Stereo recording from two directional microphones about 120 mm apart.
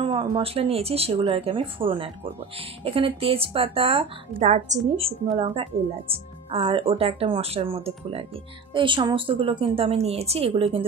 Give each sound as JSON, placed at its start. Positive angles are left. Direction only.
{"t": 0.0, "sound": "speech", "side_deg": -45}
{"t": 4.4, "sound": "a woman's voice", "side_deg": -75}
{"t": 5.4, "sound": "speech", "side_deg": -50}